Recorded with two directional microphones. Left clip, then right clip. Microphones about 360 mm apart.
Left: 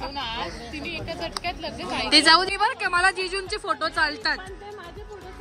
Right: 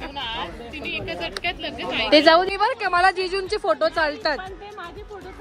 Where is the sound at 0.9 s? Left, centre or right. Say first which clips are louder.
Right 4 dB; centre.